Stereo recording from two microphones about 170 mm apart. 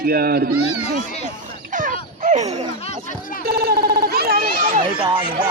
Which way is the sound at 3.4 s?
65° right (ahead or behind).